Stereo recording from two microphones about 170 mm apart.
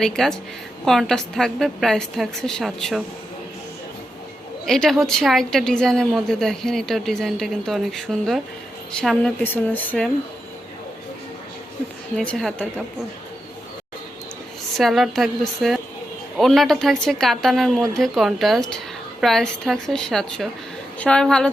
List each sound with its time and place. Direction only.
0.0 s a woman's voice: 5° left (ahead or behind)
4.6 s a woman's voice: centre (ahead or behind)
12.1 s a woman's voice: 5° left (ahead or behind)
14.8 s a woman's voice: centre (ahead or behind)